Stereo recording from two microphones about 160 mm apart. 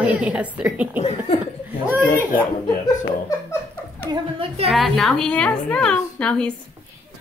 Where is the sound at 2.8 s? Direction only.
20° left (ahead or behind).